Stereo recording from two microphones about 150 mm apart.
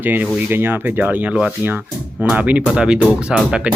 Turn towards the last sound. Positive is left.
turn(degrees=-5)  # may be behind; listen again after turning